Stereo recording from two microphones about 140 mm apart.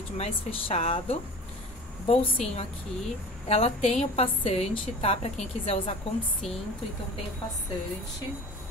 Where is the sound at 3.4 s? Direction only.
45° left (ahead or behind).